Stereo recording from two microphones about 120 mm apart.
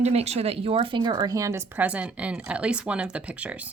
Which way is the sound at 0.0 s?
65° right (ahead or behind).